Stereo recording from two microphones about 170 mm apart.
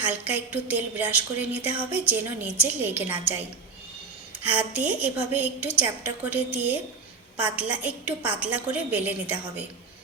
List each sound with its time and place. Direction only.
0.0 s a woman's voice: 10° right (ahead or behind)
4.4 s a woman's voice: 10° right (ahead or behind)